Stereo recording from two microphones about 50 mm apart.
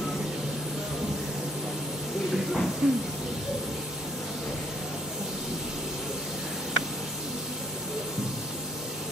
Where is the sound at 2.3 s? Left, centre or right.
Centre.